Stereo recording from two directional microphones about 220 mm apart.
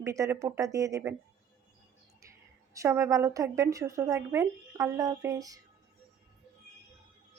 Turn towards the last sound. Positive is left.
turn(degrees=-15)  # may be behind; listen again after turning